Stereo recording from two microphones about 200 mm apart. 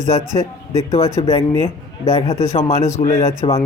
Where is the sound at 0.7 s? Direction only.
30° left (ahead or behind).